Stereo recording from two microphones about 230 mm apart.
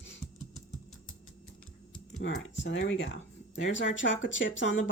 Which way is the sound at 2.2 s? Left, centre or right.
Left.